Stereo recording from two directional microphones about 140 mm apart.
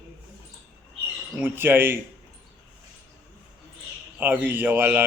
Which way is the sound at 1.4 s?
15° right (ahead or behind).